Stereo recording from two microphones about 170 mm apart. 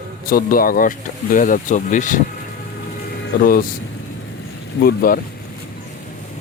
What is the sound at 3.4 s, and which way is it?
Speech, 55° left (ahead or behind).